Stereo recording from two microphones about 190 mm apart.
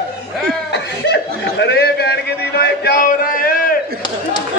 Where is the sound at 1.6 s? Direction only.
60° left (ahead or behind).